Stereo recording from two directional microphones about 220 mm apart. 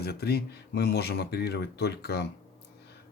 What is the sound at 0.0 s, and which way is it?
Speech, 45° left (ahead or behind).